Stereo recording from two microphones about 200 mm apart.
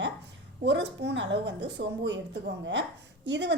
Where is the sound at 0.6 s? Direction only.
60° right (ahead or behind).